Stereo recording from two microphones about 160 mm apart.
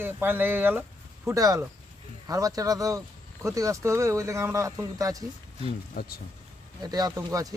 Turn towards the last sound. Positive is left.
turn(degrees=-20)  # may be behind; listen again after turning